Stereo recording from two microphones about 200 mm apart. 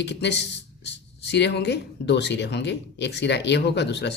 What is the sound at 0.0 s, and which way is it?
Speech, 60° left (ahead or behind).